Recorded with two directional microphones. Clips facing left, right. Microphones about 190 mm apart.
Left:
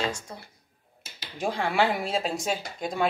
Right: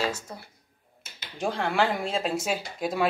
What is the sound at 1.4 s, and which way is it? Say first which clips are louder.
Speech: even; centre (ahead or behind).